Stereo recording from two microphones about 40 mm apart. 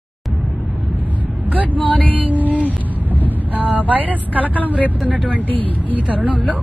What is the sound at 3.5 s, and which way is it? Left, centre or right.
Speech, right.